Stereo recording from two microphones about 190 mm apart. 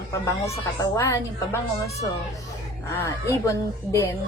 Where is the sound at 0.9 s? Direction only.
15° left (ahead or behind).